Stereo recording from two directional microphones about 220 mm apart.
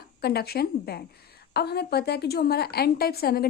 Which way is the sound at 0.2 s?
45° left (ahead or behind).